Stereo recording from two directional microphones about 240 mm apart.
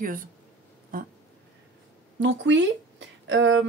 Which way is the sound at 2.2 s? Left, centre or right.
Right.